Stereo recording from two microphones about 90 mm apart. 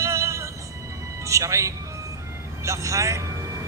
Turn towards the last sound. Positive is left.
turn(degrees=-35)  # may be behind; listen again after turning